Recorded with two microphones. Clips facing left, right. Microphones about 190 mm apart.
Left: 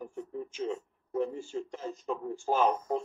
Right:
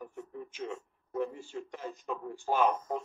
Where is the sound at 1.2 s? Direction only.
30° left (ahead or behind).